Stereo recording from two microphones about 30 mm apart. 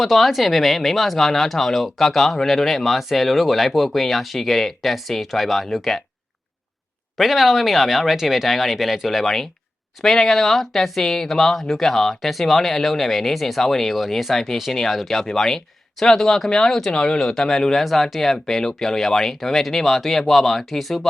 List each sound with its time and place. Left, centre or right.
0.0 s speech: centre
7.2 s speech: centre
9.2 s speech: centre
13.9 s speech: centre
16.9 s speech: left
17.2 s speech: centre
17.7 s speech: centre